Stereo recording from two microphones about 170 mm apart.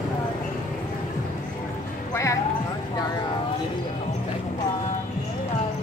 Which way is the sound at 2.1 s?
15° left (ahead or behind).